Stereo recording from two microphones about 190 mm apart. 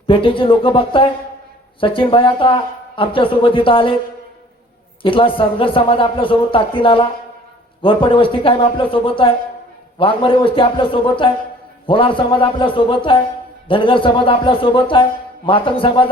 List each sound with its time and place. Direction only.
0.1 s speech: 25° left (ahead or behind)
5.0 s speech: 25° left (ahead or behind)